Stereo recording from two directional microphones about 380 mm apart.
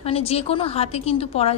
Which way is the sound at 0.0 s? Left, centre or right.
Centre.